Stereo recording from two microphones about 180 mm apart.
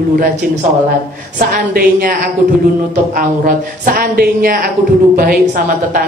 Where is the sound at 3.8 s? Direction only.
55° right (ahead or behind).